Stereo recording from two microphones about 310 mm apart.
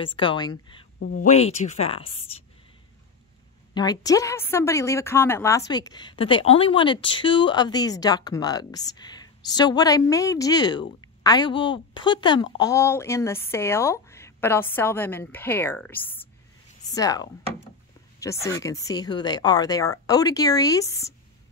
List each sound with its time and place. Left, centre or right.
0.0 s speech: centre
0.9 s a woman's voice: left
3.7 s speech: centre